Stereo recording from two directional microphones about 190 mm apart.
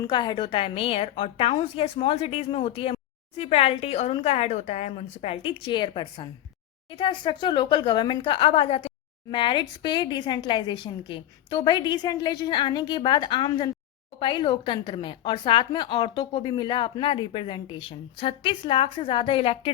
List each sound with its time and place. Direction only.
0.0 s a woman's voice: 25° left (ahead or behind)